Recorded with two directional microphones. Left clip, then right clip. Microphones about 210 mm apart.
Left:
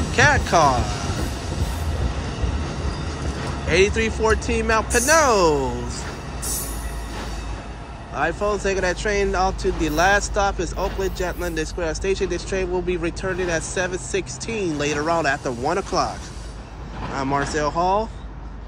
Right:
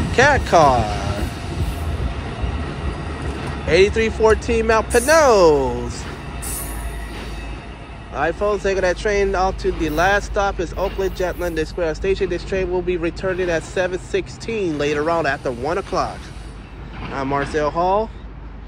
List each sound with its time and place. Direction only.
0.1 s speech: 15° left (ahead or behind)
3.6 s speech: 15° left (ahead or behind)
8.1 s speech: 15° left (ahead or behind)
17.1 s speech: 15° left (ahead or behind)